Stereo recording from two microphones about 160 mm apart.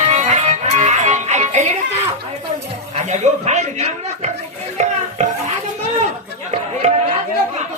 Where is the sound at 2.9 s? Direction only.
45° right (ahead or behind).